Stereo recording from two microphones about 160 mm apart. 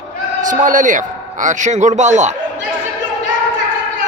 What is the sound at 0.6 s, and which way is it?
A man's voice, 55° right (ahead or behind).